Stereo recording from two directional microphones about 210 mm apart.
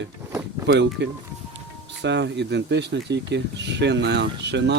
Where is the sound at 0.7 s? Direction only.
55° right (ahead or behind).